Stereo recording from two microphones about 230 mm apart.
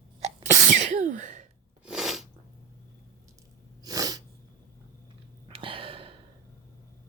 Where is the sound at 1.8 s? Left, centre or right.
Centre.